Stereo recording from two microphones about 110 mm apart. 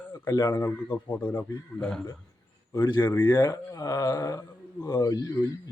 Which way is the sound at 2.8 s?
45° left (ahead or behind).